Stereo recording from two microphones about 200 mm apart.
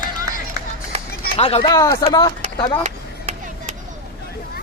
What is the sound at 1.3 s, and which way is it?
Speech, 30° left (ahead or behind).